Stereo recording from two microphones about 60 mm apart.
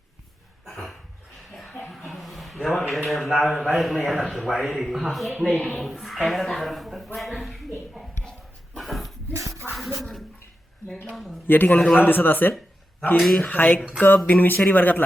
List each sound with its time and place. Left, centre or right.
1.9 s a sound: centre
2.9 s a man's voice: centre
8.7 s dog: centre
9.3 s shuffle: right
10.0 s a sound: centre
11.1 s a man's voice: centre
11.4 s speech: left
13.1 s a man's voice: centre
13.4 s speech: left
13.7 s a sound: centre
14.3 s speech: left